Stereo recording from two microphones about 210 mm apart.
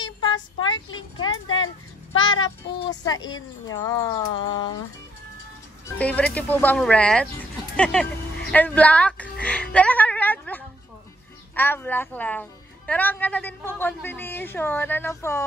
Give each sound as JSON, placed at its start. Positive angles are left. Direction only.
{"t": 0.0, "sound": "a sound", "side_deg": 20}
{"t": 0.9, "sound": "speech", "side_deg": 20}
{"t": 1.3, "sound": "music", "side_deg": 75}
{"t": 2.4, "sound": "a woman's voice", "side_deg": 20}
{"t": 5.9, "sound": "a woman's voice", "side_deg": 5}